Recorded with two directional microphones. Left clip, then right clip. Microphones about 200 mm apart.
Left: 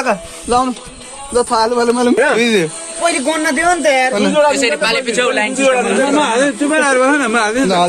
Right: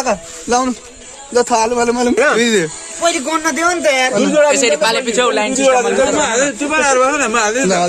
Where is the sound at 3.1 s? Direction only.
55° right (ahead or behind).